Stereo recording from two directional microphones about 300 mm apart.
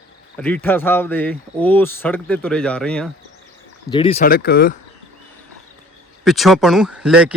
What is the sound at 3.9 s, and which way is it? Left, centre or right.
Speech, centre.